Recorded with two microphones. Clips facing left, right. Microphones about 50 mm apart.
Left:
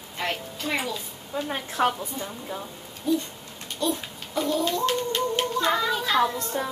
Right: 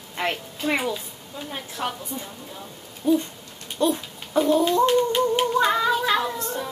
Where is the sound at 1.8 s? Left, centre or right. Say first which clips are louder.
Left 6 dB; left.